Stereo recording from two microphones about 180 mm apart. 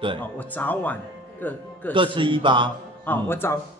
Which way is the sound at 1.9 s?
25° right (ahead or behind).